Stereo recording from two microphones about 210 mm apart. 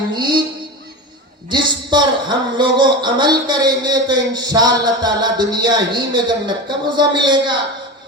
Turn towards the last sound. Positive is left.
turn(degrees=-20)  # may be behind; listen again after turning